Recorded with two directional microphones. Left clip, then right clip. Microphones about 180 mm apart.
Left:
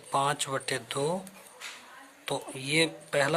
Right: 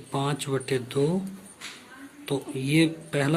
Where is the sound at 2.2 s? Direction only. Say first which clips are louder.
Right 3 dB; 25° left (ahead or behind).